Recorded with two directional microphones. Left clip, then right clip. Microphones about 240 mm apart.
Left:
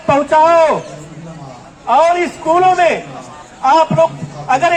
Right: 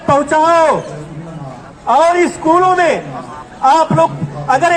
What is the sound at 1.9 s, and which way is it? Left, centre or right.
A man's voice, right.